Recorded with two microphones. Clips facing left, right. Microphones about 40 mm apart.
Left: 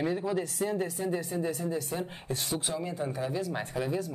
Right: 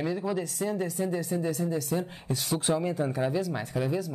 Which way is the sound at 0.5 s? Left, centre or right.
Centre.